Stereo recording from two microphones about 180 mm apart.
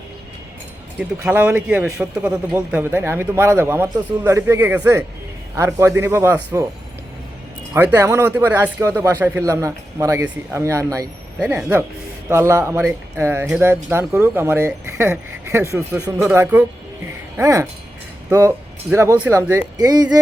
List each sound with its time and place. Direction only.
1.2 s a man's voice: 10° right (ahead or behind)
7.7 s a man's voice: 15° right (ahead or behind)
12.3 s a man's voice: 15° right (ahead or behind)